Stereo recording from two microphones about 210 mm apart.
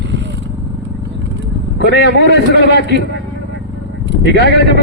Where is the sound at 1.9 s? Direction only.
55° left (ahead or behind).